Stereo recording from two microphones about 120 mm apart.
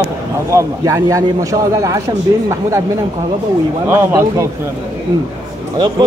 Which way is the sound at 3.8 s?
20° right (ahead or behind).